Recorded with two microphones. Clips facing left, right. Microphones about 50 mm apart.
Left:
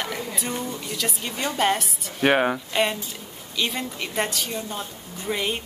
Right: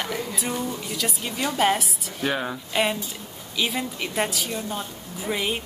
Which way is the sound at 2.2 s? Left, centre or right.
Left.